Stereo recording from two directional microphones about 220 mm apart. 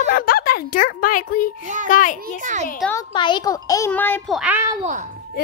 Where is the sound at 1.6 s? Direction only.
35° right (ahead or behind).